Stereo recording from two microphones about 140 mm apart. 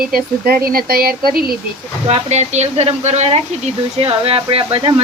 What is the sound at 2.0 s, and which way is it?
Speech, 50° right (ahead or behind).